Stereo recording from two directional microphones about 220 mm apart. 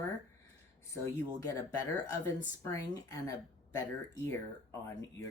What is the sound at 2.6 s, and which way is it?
Speech, 15° left (ahead or behind).